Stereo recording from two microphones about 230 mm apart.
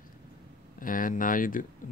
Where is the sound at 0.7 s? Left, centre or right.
Left.